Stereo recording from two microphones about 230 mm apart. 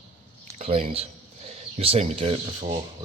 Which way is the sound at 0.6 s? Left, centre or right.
Right.